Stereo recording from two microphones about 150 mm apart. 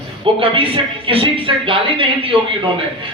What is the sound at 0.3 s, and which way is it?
Speech, 35° right (ahead or behind).